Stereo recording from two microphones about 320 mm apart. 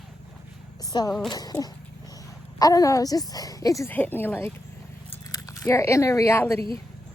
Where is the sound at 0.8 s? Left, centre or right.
Centre.